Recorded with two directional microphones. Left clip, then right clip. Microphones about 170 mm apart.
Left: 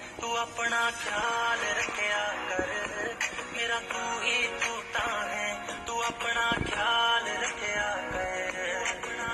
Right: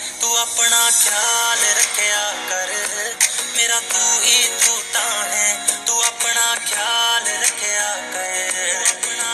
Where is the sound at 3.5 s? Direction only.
25° right (ahead or behind).